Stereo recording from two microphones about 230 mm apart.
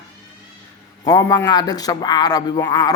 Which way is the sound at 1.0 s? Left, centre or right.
Centre.